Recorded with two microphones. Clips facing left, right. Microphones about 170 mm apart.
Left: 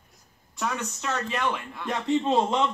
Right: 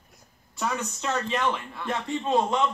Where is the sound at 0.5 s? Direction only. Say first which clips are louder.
Right 1 dB; centre (ahead or behind).